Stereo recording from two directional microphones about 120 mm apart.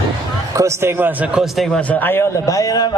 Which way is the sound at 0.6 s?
20° right (ahead or behind).